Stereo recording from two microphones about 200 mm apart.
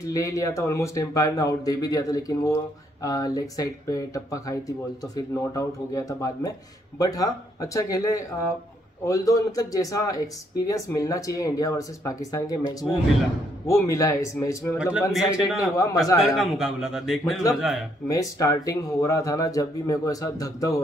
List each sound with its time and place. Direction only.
0.0 s a man's voice: 15° left (ahead or behind)
14.8 s a man's voice: 5° right (ahead or behind)
15.7 s a man's voice: 15° left (ahead or behind)
16.3 s a man's voice: centre (ahead or behind)
18.0 s a man's voice: 15° left (ahead or behind)